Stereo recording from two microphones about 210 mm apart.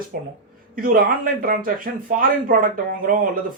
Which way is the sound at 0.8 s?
45° right (ahead or behind).